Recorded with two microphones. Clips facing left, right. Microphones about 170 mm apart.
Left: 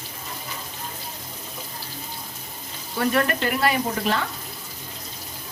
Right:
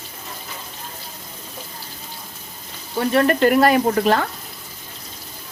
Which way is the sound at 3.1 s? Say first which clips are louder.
Right 6 dB; 30° right (ahead or behind).